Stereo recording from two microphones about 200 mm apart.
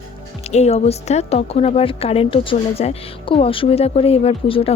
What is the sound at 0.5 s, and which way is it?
A woman's voice, 30° left (ahead or behind).